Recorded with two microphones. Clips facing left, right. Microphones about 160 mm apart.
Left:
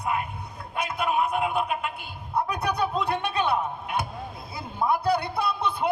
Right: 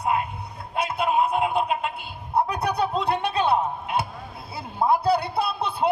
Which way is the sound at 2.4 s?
35° right (ahead or behind).